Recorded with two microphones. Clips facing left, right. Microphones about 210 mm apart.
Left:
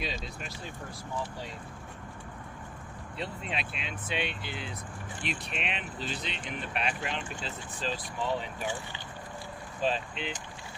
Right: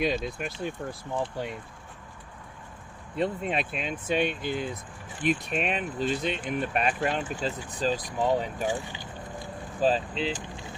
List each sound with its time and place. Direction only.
0.0 s speech: 50° right (ahead or behind)
3.2 s speech: 50° right (ahead or behind)
9.8 s speech: 35° right (ahead or behind)